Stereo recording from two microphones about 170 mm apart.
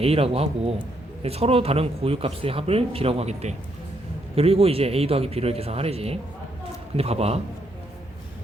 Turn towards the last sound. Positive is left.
turn(degrees=-35)  # may be behind; listen again after turning